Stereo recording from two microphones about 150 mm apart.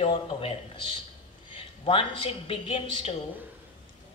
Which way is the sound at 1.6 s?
35° left (ahead or behind).